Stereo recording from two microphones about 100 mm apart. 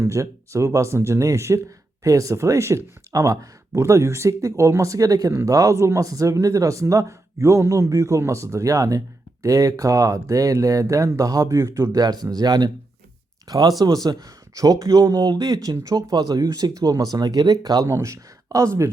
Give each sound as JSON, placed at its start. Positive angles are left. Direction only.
{"t": 0.0, "sound": "speech", "side_deg": -30}
{"t": 17.8, "sound": "speech", "side_deg": -30}